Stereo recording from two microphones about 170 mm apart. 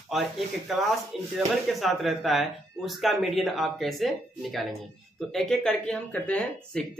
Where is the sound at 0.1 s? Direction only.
Centre (ahead or behind).